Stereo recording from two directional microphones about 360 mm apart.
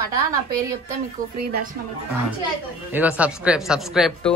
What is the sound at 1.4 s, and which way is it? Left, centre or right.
Speech, right.